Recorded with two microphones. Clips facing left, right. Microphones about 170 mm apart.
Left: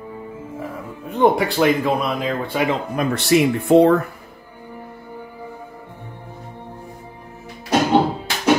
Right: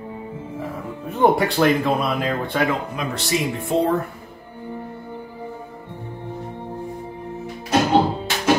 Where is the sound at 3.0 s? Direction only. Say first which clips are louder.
Left 7 dB; 60° left (ahead or behind).